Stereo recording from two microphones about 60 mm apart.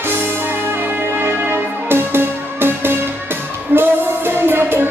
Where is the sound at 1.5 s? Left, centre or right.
Right.